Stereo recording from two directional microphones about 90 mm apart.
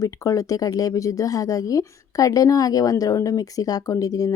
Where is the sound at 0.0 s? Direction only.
40° left (ahead or behind).